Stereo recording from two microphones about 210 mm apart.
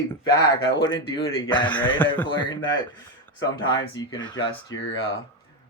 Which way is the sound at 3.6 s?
20° left (ahead or behind).